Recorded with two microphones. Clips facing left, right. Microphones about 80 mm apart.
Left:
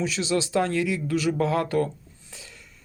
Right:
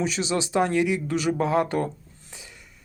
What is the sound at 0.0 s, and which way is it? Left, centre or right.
Speech, right.